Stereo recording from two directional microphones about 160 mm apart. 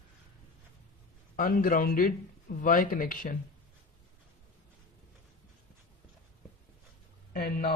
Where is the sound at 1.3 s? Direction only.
60° left (ahead or behind).